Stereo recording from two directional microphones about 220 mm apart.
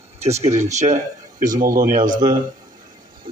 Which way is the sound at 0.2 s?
30° right (ahead or behind).